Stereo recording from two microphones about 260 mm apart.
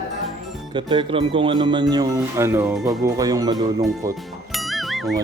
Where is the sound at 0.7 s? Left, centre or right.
Centre.